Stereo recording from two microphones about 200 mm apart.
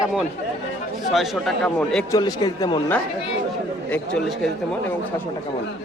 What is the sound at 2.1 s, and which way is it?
Speech, 20° left (ahead or behind).